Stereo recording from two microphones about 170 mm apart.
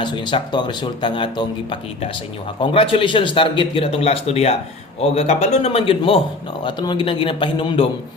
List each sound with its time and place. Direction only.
0.0 s speech: 25° left (ahead or behind)